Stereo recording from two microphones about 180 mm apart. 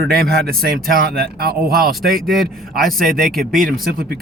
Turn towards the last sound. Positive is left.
turn(degrees=-55)  # may be behind; listen again after turning